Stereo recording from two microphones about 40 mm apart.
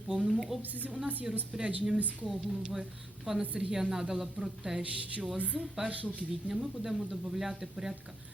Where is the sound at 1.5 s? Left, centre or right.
Centre.